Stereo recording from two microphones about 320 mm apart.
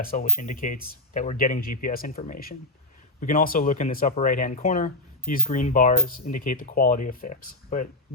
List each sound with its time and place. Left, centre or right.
0.0 s speech: left